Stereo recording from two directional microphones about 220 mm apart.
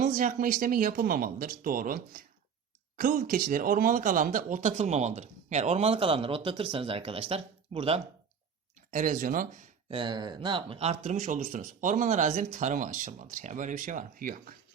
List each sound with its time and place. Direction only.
0.0 s speech: 35° right (ahead or behind)
8.9 s speech: 35° right (ahead or behind)
9.9 s speech: 20° right (ahead or behind); by 14.5 s 40° right (ahead or behind)